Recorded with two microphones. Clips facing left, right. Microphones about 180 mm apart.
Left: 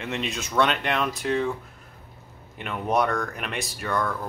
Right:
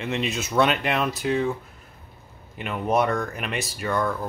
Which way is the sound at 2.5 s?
5° right (ahead or behind).